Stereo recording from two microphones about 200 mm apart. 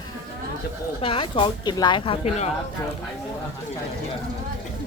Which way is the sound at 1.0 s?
25° left (ahead or behind).